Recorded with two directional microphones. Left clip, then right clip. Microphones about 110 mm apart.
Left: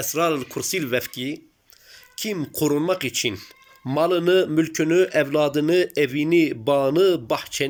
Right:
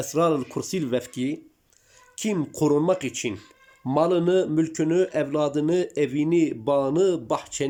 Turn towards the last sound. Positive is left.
turn(degrees=-35)  # may be behind; listen again after turning